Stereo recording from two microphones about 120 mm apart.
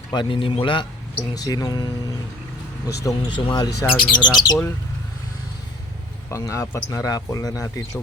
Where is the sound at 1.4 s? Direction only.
30° left (ahead or behind).